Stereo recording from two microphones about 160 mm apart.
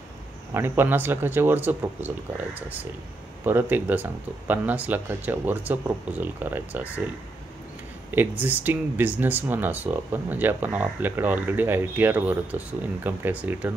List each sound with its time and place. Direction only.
0.5 s speech: 15° right (ahead or behind)
8.1 s speech: 10° right (ahead or behind)